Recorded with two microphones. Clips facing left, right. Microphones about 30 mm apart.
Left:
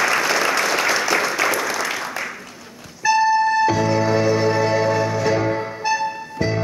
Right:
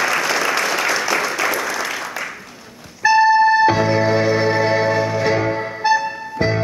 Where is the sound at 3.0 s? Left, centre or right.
Right.